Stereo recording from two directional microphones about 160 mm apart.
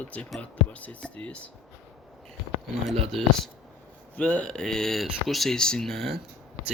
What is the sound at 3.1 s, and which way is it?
Speech, centre (ahead or behind).